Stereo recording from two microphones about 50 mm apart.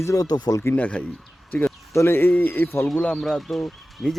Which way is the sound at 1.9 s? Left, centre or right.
Left.